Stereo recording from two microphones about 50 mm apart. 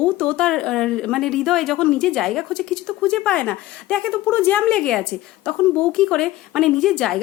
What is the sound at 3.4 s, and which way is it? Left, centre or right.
Speech, left.